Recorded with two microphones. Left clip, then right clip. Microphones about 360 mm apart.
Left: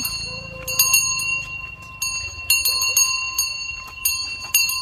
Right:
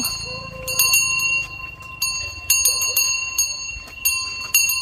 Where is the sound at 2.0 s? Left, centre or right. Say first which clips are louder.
Right 1 dB; centre.